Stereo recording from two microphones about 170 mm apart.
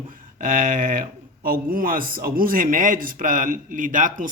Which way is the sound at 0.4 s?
55° right (ahead or behind).